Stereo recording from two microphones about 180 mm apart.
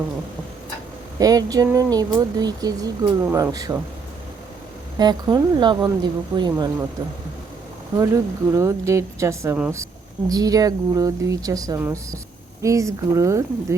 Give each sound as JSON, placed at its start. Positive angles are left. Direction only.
{"t": 1.2, "sound": "speech", "side_deg": -20}
{"t": 4.9, "sound": "speech", "side_deg": -25}
{"t": 7.9, "sound": "speech", "side_deg": -15}